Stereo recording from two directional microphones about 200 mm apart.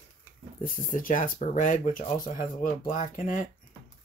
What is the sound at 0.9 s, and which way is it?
Speech, 40° left (ahead or behind).